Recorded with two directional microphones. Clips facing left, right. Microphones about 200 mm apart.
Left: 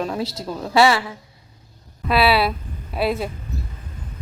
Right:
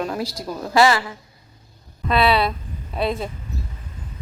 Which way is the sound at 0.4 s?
Centre (ahead or behind).